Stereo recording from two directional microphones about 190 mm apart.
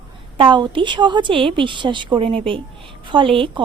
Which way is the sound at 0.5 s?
25° right (ahead or behind).